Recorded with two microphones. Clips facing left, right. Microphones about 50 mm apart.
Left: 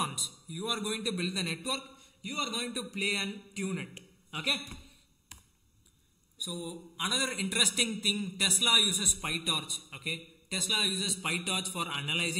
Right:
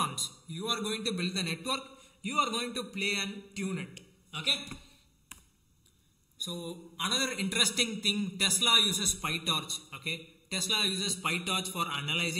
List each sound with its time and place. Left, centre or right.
0.0 s a man's voice: centre
2.0 s a sound: centre
2.5 s a man's voice: centre
3.9 s a man's voice: left
4.6 s speech: centre
5.3 s a sound: right
6.3 s a man's voice: centre